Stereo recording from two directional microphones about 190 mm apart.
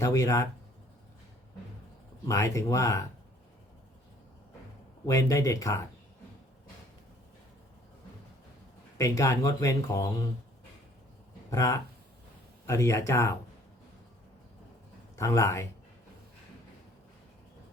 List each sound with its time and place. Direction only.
0.0 s speech: 15° left (ahead or behind)
2.2 s speech: 15° left (ahead or behind)
5.0 s speech: 15° left (ahead or behind)
9.0 s speech: 15° left (ahead or behind)
11.5 s speech: 15° left (ahead or behind)
15.1 s speech: 15° left (ahead or behind)